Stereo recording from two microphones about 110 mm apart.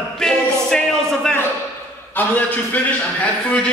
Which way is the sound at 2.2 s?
15° left (ahead or behind).